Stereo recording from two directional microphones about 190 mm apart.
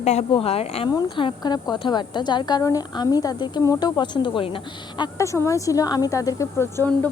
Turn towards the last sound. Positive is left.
turn(degrees=10)  # may be behind; listen again after turning